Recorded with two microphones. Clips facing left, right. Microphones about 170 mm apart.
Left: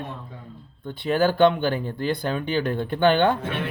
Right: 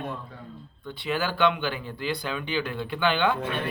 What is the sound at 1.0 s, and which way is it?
Speech, 45° left (ahead or behind).